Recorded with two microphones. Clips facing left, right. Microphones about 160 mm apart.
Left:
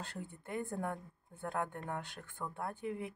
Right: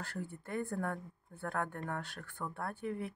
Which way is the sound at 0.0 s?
20° left (ahead or behind).